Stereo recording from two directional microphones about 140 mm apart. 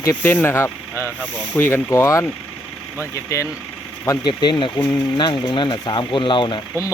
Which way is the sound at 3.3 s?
20° left (ahead or behind).